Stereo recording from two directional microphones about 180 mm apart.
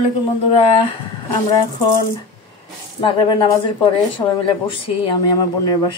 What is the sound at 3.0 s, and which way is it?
Speech, 30° left (ahead or behind).